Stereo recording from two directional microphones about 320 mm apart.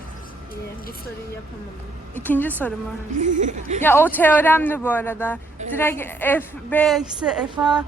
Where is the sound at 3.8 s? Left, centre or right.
Centre.